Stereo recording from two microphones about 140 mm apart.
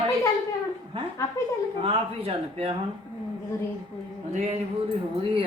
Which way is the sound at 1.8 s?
45° right (ahead or behind).